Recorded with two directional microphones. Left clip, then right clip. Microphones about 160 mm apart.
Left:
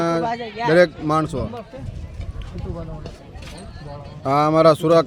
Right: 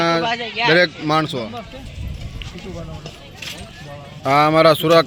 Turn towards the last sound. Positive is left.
turn(degrees=10)  # may be behind; listen again after turning